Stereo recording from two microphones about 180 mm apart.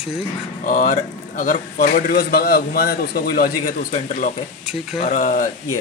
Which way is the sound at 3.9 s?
45° left (ahead or behind).